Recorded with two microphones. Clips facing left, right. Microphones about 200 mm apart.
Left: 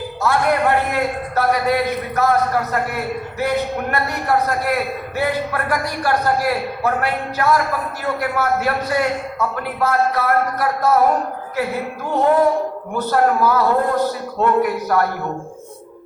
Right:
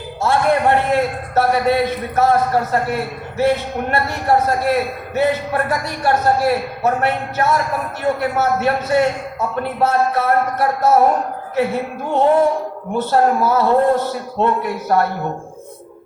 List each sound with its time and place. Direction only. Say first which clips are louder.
0.2 s a man's voice: right 2 dB; 25° right (ahead or behind)